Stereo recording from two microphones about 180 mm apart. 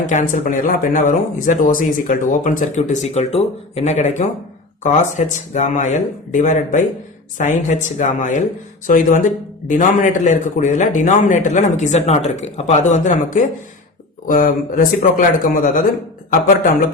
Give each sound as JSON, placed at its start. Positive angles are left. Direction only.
{"t": 0.0, "sound": "speech", "side_deg": 45}